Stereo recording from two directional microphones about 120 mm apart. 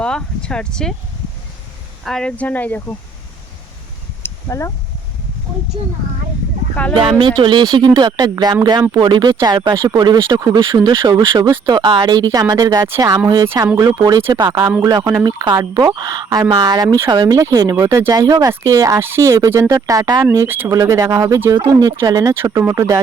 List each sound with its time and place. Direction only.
0.0 s speech: 10° left (ahead or behind)
2.0 s speech: 5° left (ahead or behind)
4.2 s a sound: 25° left (ahead or behind)
6.9 s speech: 45° right (ahead or behind); by 14.3 s 25° right (ahead or behind)
14.3 s speech: 40° right (ahead or behind)
20.3 s speech: 20° right (ahead or behind)